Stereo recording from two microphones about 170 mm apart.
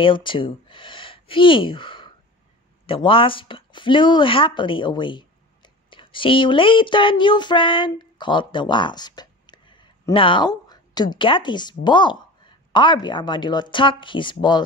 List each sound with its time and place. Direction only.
0.0 s speech: 30° left (ahead or behind)